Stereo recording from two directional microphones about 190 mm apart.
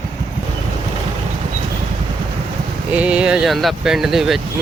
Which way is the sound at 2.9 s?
5° right (ahead or behind).